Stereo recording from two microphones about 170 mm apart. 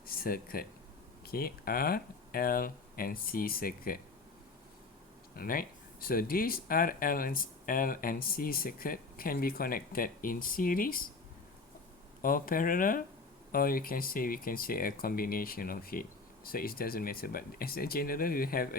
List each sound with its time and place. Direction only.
0.0 s speech: 60° left (ahead or behind)
5.4 s speech: 60° left (ahead or behind)
12.2 s speech: 55° left (ahead or behind)